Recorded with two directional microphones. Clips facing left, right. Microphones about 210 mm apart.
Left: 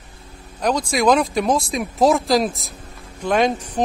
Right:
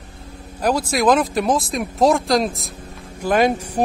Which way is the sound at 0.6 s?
5° right (ahead or behind).